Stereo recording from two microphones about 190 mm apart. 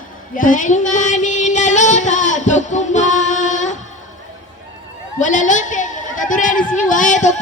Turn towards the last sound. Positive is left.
turn(degrees=40)  # may be behind; listen again after turning